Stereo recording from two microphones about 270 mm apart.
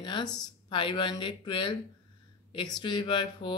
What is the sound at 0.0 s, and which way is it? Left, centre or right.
A woman's voice, centre.